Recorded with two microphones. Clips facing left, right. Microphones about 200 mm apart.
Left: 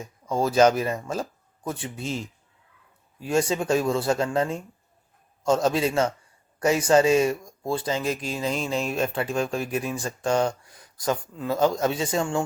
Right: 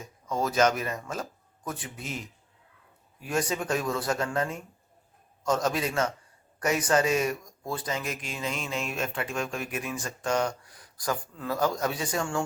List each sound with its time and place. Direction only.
0.3 s speech: 30° left (ahead or behind)